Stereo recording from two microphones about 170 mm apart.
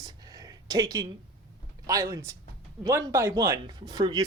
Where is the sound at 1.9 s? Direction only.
20° right (ahead or behind).